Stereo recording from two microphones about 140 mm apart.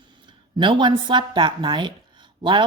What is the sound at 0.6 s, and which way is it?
Speech, 35° right (ahead or behind).